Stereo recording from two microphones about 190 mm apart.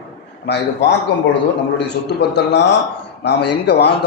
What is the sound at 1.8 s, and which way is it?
A man's voice, 60° left (ahead or behind).